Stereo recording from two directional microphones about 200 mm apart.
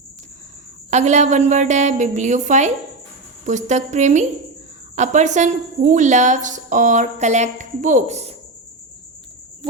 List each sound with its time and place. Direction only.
0.9 s speech: 35° right (ahead or behind)